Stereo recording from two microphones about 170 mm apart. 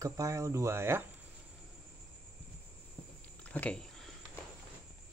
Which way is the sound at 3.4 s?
10° left (ahead or behind).